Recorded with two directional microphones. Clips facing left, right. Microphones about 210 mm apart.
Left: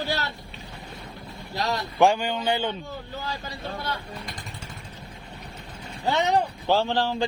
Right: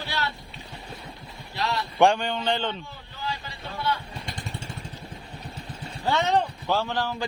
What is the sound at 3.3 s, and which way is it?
Speech, 40° left (ahead or behind).